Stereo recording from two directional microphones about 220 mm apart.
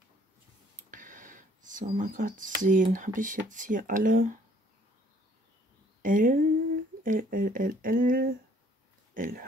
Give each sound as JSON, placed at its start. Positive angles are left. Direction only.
{"t": 0.8, "sound": "speech", "side_deg": -35}
{"t": 6.0, "sound": "speech", "side_deg": -40}